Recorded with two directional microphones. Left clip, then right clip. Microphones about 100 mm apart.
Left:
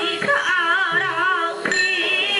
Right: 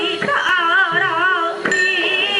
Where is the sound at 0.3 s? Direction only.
5° left (ahead or behind).